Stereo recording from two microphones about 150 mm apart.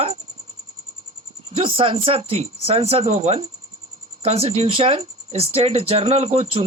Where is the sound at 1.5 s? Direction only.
35° right (ahead or behind).